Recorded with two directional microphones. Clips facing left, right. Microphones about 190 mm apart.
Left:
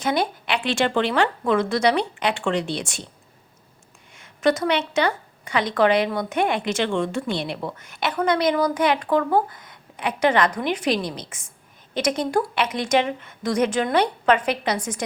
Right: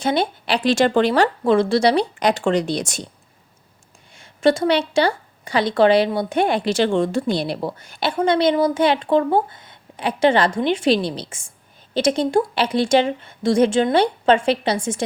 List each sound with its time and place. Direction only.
0.0 s a woman's voice: 30° right (ahead or behind)
4.1 s a woman's voice: 30° right (ahead or behind)